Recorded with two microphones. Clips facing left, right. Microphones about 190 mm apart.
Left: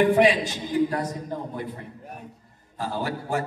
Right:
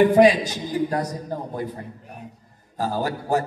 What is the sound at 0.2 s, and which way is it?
Speech, 40° right (ahead or behind).